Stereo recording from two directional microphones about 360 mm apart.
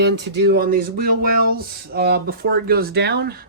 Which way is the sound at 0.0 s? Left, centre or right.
Right.